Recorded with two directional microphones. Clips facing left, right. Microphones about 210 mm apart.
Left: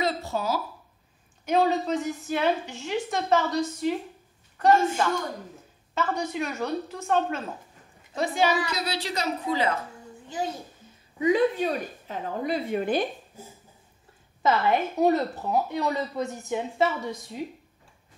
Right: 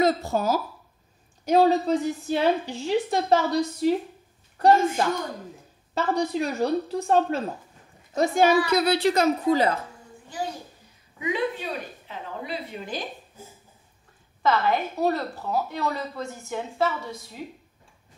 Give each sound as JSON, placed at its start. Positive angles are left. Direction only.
{"t": 0.0, "sound": "a woman's voice", "side_deg": -45}
{"t": 1.4, "sound": "a woman's voice", "side_deg": -35}
{"t": 8.1, "sound": "a woman's voice", "side_deg": -45}
{"t": 11.1, "sound": "a woman's voice", "side_deg": 40}
{"t": 14.4, "sound": "a woman's voice", "side_deg": 20}